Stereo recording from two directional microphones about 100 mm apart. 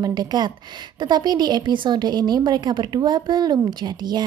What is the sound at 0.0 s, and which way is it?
A woman's voice, 45° right (ahead or behind).